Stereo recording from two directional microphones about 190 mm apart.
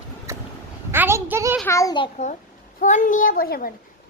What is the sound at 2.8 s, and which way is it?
Speech, 40° left (ahead or behind).